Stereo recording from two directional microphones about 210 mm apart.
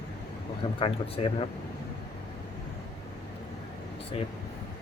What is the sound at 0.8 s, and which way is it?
Speech, 25° left (ahead or behind).